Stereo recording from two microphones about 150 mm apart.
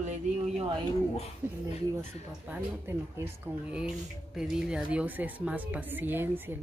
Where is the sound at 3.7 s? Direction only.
5° right (ahead or behind).